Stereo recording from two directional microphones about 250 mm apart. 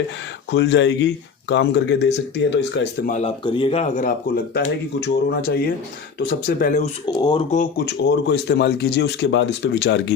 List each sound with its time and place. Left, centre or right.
0.5 s speech: left
3.1 s speech: left
7.0 s speech: centre
7.5 s speech: left